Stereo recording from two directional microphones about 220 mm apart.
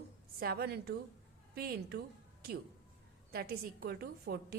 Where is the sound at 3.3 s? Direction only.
45° right (ahead or behind).